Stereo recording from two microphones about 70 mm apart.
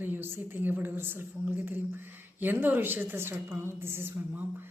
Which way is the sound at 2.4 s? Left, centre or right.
Right.